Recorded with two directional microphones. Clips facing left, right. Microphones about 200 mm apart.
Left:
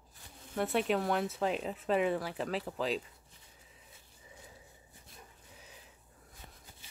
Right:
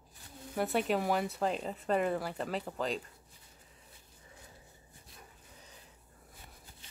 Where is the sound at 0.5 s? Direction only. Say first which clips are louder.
Even; centre (ahead or behind).